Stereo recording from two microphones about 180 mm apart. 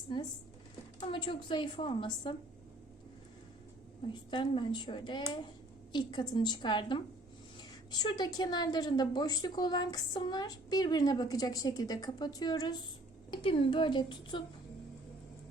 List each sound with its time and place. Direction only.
0.9 s a woman's voice: 25° left (ahead or behind)
4.3 s a woman's voice: 25° left (ahead or behind)